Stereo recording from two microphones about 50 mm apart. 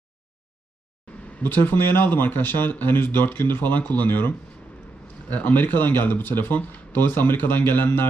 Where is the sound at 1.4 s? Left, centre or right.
Left.